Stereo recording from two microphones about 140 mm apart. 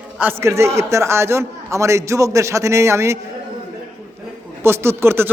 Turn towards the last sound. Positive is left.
turn(degrees=-15)  # may be behind; listen again after turning